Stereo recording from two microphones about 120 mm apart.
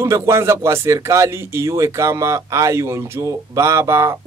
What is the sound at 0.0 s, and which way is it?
Speech, 25° right (ahead or behind).